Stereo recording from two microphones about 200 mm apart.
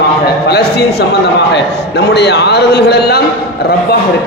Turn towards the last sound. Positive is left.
turn(degrees=55)  # may be behind; listen again after turning